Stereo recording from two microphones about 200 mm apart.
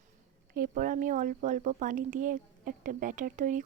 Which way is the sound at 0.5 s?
45° right (ahead or behind).